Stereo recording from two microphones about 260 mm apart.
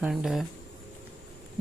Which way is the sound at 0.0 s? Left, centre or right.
Centre.